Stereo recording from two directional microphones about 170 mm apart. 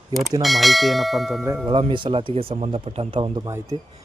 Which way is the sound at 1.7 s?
30° right (ahead or behind).